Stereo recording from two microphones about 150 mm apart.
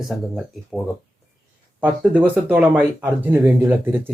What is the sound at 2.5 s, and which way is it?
Speech, 10° right (ahead or behind).